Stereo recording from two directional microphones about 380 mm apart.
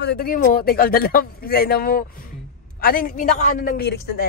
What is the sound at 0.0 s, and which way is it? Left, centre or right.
Speech, left.